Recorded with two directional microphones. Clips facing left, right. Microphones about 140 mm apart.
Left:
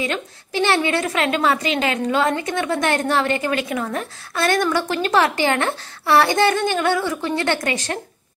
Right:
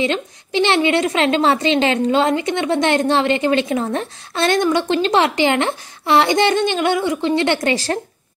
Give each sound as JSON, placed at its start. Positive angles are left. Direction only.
{"t": 0.0, "sound": "a woman's voice", "side_deg": -20}